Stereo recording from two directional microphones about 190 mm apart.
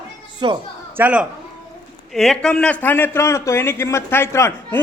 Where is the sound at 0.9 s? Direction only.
5° right (ahead or behind).